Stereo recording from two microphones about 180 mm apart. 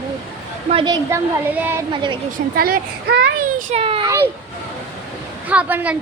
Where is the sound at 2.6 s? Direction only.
55° right (ahead or behind).